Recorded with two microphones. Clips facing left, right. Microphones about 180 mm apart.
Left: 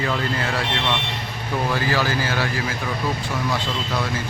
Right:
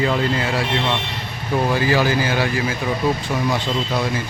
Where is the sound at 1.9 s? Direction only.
15° right (ahead or behind).